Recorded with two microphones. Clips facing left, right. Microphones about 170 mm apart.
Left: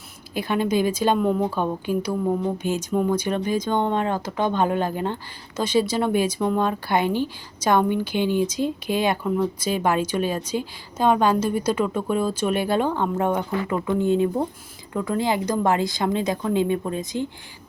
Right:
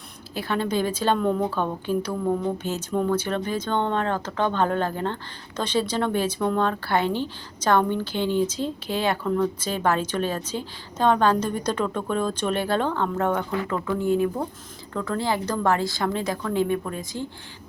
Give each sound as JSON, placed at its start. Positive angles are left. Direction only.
{"t": 0.3, "sound": "speech", "side_deg": 15}